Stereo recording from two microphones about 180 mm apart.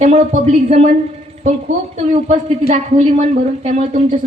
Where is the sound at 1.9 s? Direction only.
40° right (ahead or behind).